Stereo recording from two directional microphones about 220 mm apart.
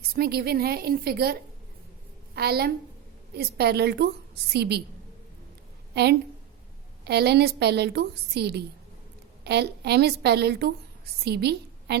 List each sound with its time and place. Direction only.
0.1 s a woman's voice: 45° right (ahead or behind)
5.9 s a woman's voice: 50° right (ahead or behind)